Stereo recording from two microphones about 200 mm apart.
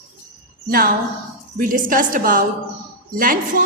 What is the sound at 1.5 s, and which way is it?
A woman's voice, 45° right (ahead or behind).